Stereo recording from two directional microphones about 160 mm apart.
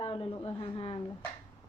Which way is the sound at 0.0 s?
35° left (ahead or behind).